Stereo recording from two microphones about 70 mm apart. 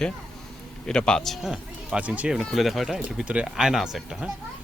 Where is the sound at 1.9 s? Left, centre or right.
Centre.